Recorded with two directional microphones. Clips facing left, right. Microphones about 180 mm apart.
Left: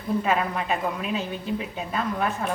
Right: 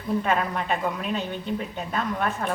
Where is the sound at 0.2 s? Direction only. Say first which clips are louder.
Even; 5° left (ahead or behind).